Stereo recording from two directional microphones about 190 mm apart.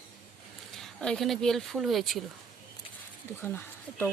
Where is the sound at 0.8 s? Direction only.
5° left (ahead or behind).